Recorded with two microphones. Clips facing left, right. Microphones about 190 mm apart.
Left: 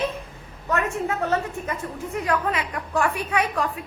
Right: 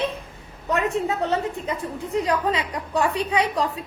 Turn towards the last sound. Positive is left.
turn(degrees=-20)  # may be behind; listen again after turning